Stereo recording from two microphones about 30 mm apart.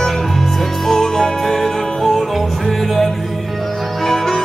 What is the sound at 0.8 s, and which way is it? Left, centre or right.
Music, centre.